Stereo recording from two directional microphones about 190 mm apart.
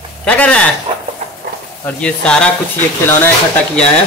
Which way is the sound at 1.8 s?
5° left (ahead or behind).